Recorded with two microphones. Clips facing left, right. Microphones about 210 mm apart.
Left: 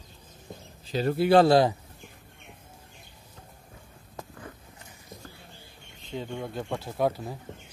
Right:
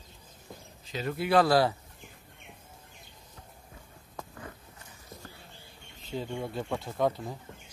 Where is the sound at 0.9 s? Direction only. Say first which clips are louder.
Left 6 dB; 35° left (ahead or behind).